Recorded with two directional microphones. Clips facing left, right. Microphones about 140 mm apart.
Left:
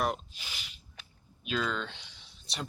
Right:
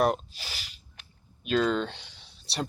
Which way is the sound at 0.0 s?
35° right (ahead or behind).